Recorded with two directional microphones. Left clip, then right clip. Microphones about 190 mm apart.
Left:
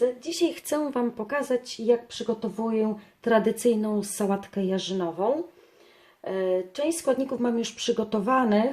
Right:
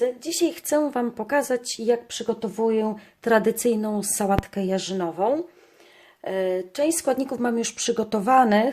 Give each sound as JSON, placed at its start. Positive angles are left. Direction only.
{"t": 0.2, "sound": "a woman's voice", "side_deg": -30}